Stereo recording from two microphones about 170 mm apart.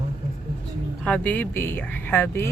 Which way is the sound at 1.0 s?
10° left (ahead or behind).